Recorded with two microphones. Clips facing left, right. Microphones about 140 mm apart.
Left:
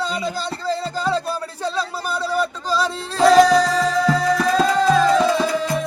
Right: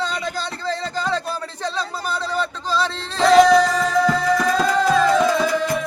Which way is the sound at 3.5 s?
35° left (ahead or behind).